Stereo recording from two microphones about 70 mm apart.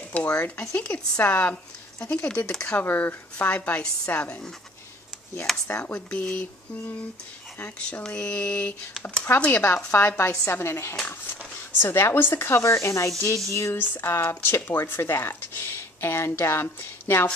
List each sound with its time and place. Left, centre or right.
0.1 s speech: centre
5.5 s speech: centre
5.9 s speech: centre
7.8 s a sound: centre
9.2 s speech: left